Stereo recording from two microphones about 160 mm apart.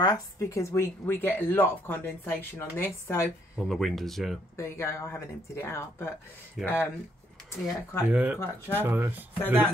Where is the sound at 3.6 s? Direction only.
Centre (ahead or behind).